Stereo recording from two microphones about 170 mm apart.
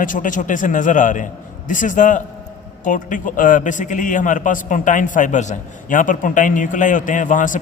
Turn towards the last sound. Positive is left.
turn(degrees=50)  # may be behind; listen again after turning